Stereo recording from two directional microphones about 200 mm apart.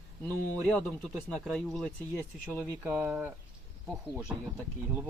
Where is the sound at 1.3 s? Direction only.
5° left (ahead or behind).